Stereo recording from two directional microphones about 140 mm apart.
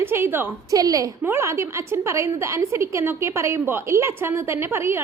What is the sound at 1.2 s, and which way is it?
A woman's voice, 15° right (ahead or behind).